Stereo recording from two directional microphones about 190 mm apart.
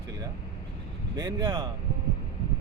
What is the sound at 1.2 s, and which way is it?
Speech, 20° right (ahead or behind).